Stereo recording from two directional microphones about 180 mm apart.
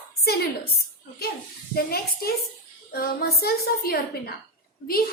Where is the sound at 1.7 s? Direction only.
55° left (ahead or behind).